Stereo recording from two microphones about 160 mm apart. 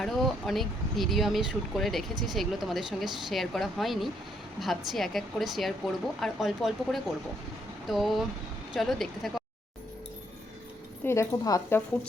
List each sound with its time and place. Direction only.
0.0 s speech: centre (ahead or behind)
11.0 s a woman's voice: 15° left (ahead or behind)